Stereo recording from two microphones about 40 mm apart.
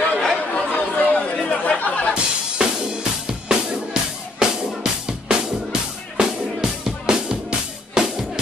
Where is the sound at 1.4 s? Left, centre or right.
Left.